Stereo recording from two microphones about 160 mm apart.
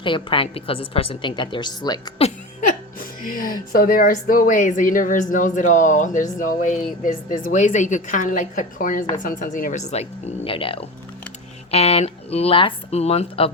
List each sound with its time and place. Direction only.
0.0 s a woman's voice: 30° left (ahead or behind)
2.2 s a woman's voice: 50° left (ahead or behind); by 13.5 s 35° left (ahead or behind)